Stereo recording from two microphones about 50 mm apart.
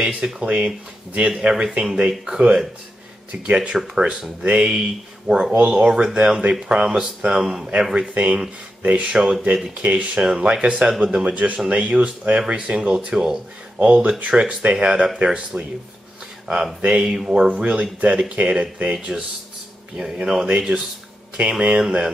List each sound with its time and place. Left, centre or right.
0.0 s speech: centre
3.3 s speech: right
3.7 s speech: centre
5.3 s speech: centre
5.6 s speech: right
5.9 s speech: centre
9.8 s speech: right
11.2 s speech: right
13.7 s speech: right
16.4 s speech: centre